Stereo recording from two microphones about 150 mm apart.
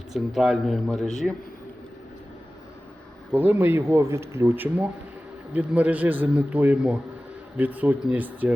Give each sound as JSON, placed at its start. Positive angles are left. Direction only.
{"t": 0.1, "sound": "speech", "side_deg": 0}
{"t": 3.3, "sound": "speech", "side_deg": -15}